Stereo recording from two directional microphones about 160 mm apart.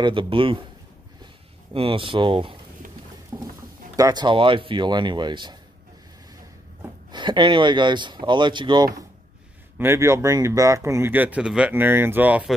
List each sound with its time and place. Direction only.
0.0 s a man's voice: 30° right (ahead or behind)
1.2 s a sound: 35° right (ahead or behind)
3.3 s patter: 25° right (ahead or behind)
3.9 s speech: 25° right (ahead or behind)
7.1 s speech: 30° right (ahead or behind)
9.8 s speech: 15° right (ahead or behind)